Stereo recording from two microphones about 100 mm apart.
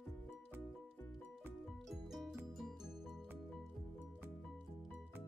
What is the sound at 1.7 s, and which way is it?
Music, centre (ahead or behind).